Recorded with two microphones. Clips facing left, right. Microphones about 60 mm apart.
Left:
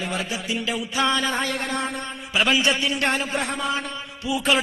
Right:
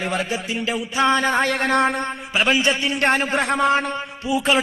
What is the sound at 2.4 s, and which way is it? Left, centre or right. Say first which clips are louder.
A man's voice: right 1 dB; right.